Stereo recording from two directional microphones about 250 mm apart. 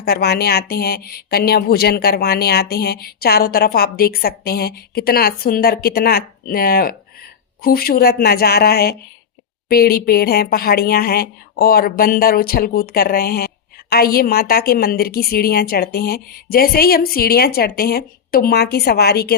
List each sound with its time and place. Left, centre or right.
0.0 s speech: left